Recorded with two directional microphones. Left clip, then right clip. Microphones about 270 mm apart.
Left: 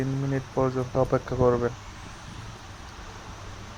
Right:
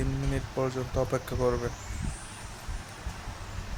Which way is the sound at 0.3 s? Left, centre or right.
Centre.